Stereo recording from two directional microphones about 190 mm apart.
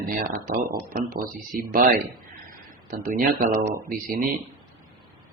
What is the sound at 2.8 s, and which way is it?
Speech, 50° right (ahead or behind).